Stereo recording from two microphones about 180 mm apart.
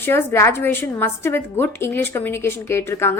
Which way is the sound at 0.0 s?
15° left (ahead or behind).